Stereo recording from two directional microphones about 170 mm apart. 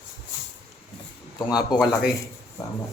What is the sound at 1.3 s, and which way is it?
Speech, 25° left (ahead or behind).